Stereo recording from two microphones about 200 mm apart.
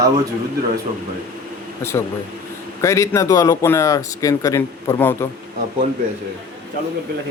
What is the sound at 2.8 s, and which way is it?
A man's voice, 15° left (ahead or behind).